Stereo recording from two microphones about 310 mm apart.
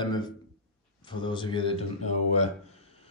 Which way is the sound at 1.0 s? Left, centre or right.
Centre.